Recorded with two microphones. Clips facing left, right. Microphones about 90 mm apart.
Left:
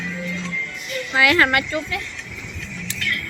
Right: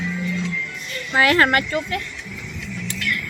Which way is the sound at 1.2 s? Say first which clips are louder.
Right 1 dB; 40° right (ahead or behind).